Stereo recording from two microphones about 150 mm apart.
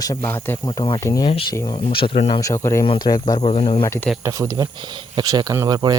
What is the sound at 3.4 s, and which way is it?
Speech, 45° left (ahead or behind).